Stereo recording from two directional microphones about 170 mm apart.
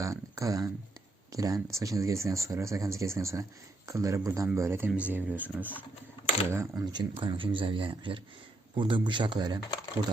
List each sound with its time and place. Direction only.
0.0 s a sound: 20° right (ahead or behind)
1.3 s speech: 20° right (ahead or behind)
6.9 s speech: 30° right (ahead or behind)